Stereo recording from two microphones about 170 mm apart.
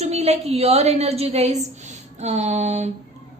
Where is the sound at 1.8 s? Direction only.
40° right (ahead or behind).